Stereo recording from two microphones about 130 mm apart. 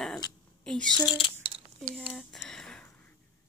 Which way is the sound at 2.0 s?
Centre (ahead or behind).